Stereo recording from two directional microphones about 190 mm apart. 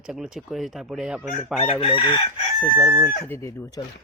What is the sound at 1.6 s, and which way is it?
Chicken, 30° left (ahead or behind).